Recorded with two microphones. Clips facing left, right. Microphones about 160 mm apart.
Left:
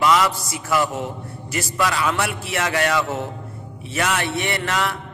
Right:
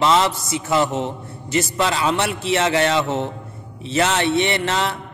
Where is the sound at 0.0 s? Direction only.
25° right (ahead or behind).